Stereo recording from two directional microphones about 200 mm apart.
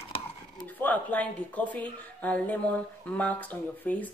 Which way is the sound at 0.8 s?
10° left (ahead or behind).